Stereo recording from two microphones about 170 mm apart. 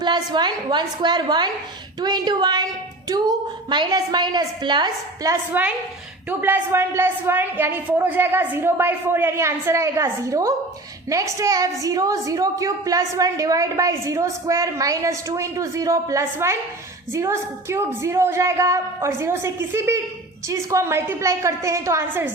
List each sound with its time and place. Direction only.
0.0 s a woman's voice: 25° right (ahead or behind)